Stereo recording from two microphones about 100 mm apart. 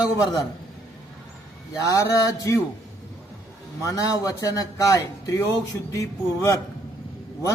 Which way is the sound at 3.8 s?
35° left (ahead or behind).